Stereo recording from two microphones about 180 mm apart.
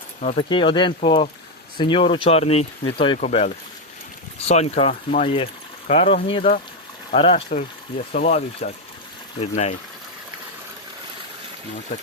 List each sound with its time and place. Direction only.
0.2 s speech: 40° left (ahead or behind)
0.4 s speech: 25° left (ahead or behind)
3.2 s speech: 40° left (ahead or behind)